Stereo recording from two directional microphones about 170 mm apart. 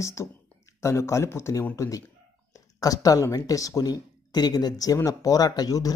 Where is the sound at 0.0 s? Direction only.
20° left (ahead or behind).